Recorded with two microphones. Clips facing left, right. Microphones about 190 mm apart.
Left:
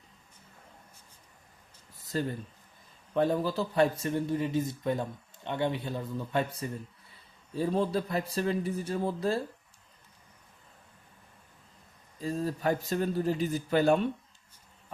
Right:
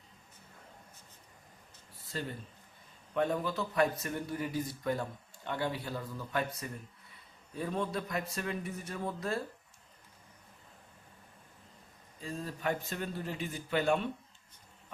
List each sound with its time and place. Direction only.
2.0 s a sound: 40° left (ahead or behind)
3.2 s a man's voice: 35° left (ahead or behind)
12.2 s speech: 40° left (ahead or behind)